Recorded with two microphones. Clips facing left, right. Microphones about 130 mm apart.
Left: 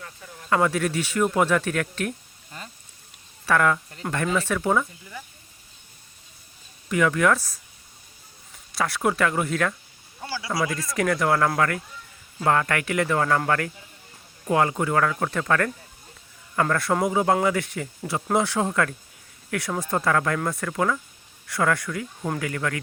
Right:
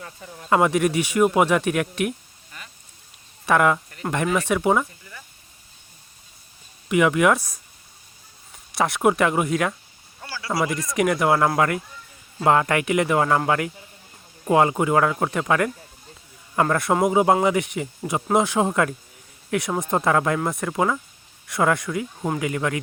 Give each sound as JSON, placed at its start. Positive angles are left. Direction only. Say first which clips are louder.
{"t": 0.5, "sound": "speech", "louder": "right 4 dB", "side_deg": -20}
{"t": 3.4, "sound": "speech", "louder": "right 3 dB", "side_deg": -20}
{"t": 6.8, "sound": "speech", "louder": "right 3 dB", "side_deg": -15}
{"t": 8.7, "sound": "speech", "louder": "right 4 dB", "side_deg": -20}
{"t": 10.2, "sound": "speech", "louder": "left 3 dB", "side_deg": 15}
{"t": 10.6, "sound": "speech", "louder": "right 4 dB", "side_deg": -15}